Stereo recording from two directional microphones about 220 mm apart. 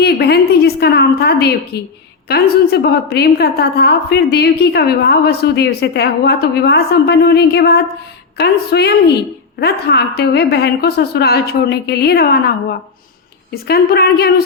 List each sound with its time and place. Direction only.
0.0 s a woman's voice: 45° left (ahead or behind)